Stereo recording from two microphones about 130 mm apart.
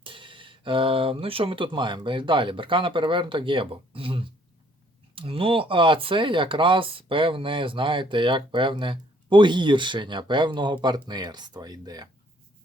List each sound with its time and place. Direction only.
0.0 s speech: 40° right (ahead or behind)